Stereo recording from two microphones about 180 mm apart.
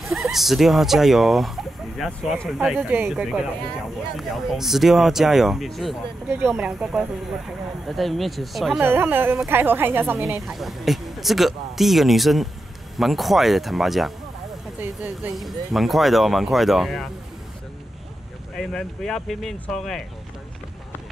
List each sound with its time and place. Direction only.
0.0 s a woman's voice: centre (ahead or behind)
8.8 s a woman's voice: 10° right (ahead or behind)
10.4 s speech: centre (ahead or behind)
15.3 s speech: centre (ahead or behind)
18.6 s speech: centre (ahead or behind)